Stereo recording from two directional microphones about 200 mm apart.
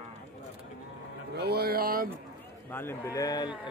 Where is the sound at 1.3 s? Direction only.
55° right (ahead or behind).